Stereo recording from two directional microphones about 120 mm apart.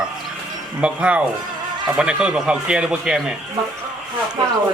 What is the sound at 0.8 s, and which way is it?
A man's voice, 10° right (ahead or behind).